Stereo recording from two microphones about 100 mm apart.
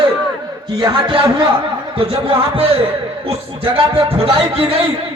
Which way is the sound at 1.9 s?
65° right (ahead or behind).